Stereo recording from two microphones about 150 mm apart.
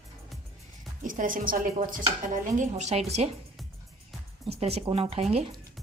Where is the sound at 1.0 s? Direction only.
65° right (ahead or behind).